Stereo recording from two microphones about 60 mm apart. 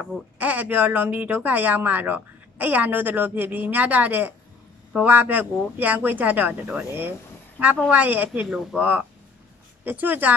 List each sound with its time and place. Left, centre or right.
0.0 s speech: right
6.9 s speech: right
8.4 s speech: centre
8.7 s speech: right